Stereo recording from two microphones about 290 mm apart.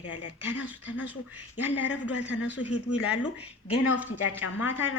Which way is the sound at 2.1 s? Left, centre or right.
Left.